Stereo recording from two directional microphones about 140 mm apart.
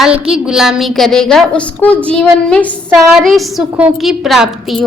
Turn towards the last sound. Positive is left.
turn(degrees=0)  # may be behind; listen again after turning